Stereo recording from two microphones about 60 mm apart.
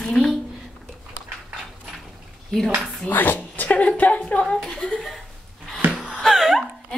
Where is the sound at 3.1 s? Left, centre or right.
Left.